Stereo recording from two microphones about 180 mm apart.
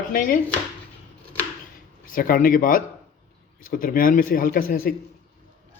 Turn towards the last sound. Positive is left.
turn(degrees=55)  # may be behind; listen again after turning